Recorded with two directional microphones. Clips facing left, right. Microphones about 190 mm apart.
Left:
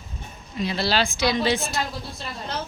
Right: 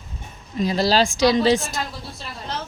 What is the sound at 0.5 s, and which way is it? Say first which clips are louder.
A woman's voice: right 5 dB; 40° right (ahead or behind).